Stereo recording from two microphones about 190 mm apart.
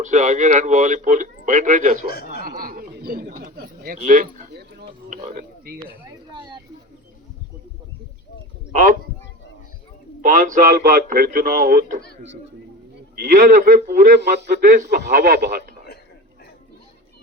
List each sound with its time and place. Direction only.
0.0 s speech: 40° right (ahead or behind)
2.4 s a sound: 50° right (ahead or behind)
6.1 s a sound: 25° right (ahead or behind)
8.7 s a man's voice: 40° right (ahead or behind)
10.2 s a man's voice: 45° right (ahead or behind)
13.1 s a man's voice: 45° right (ahead or behind)